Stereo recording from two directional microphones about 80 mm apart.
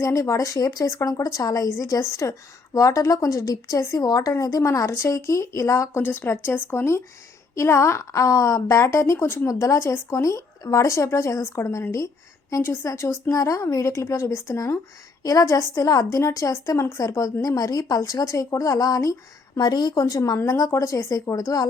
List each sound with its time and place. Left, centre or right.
0.0 s a woman's voice: left
9.5 s a woman's voice: left
19.5 s speech: left